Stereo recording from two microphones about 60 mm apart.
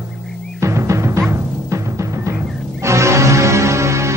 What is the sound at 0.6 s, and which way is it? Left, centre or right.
Timpani, right.